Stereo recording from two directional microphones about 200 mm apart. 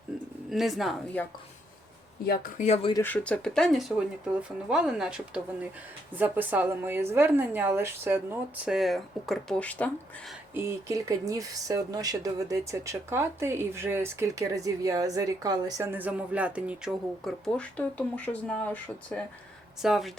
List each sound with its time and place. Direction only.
0.5 s speech: centre (ahead or behind)
2.2 s speech: 50° left (ahead or behind)
2.9 s speech: 10° left (ahead or behind)
10.5 s speech: 15° right (ahead or behind)